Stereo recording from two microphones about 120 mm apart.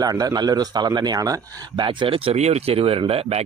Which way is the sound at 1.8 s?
45° right (ahead or behind).